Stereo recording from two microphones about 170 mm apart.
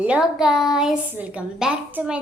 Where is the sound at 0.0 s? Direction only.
5° right (ahead or behind).